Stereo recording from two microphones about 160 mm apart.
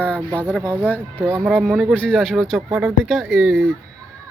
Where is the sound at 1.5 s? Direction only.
5° left (ahead or behind).